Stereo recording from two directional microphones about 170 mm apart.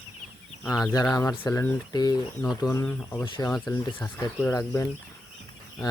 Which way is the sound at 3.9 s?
30° left (ahead or behind).